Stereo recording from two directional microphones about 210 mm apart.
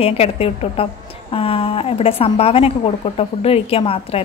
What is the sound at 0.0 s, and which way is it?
A woman's voice, 30° left (ahead or behind).